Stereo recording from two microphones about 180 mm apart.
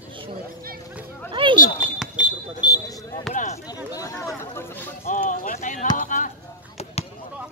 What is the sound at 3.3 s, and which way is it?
Speech, 45° left (ahead or behind).